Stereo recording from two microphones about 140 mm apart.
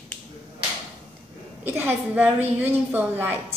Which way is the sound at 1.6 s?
15° right (ahead or behind).